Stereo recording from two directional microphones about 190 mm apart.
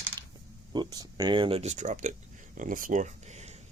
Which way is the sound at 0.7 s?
20° right (ahead or behind).